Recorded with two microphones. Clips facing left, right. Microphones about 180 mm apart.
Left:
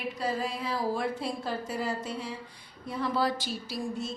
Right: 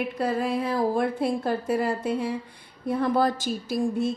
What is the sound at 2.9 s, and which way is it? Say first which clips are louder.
Speech: right 6 dB; 50° right (ahead or behind).